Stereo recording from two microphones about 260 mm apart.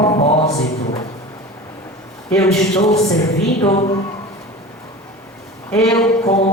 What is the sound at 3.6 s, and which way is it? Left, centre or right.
Music, left.